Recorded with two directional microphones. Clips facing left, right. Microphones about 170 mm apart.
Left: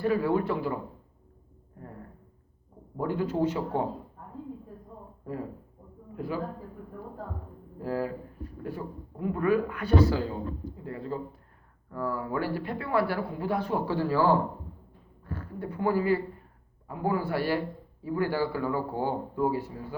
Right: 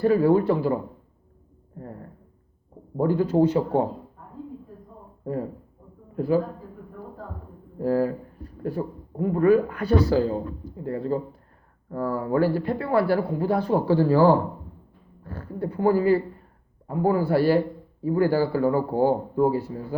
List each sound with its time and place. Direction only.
0.0 s speech: 35° right (ahead or behind)
3.0 s speech: 35° right (ahead or behind)
6.1 s speech: 35° right (ahead or behind)
7.8 s speech: 40° right (ahead or behind)